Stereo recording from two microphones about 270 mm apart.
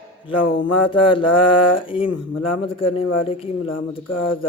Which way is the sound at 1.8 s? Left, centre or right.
Centre.